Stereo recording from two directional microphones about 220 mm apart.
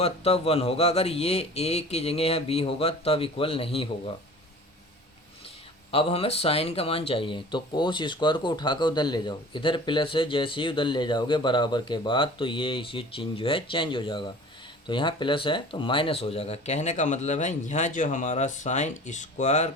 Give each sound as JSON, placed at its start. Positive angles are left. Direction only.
{"t": 0.0, "sound": "speech", "side_deg": 25}
{"t": 5.9, "sound": "speech", "side_deg": 25}